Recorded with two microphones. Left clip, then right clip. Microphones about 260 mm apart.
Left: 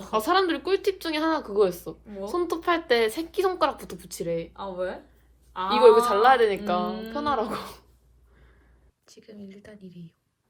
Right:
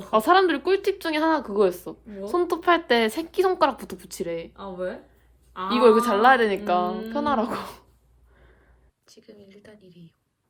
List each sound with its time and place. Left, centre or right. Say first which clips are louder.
0.1 s speech: right 4 dB; right
4.5 s speech: left 1 dB; centre
5.6 s speech: left 1 dB; right
9.1 s speech: left 1 dB; centre
9.8 s speech: left 3 dB; centre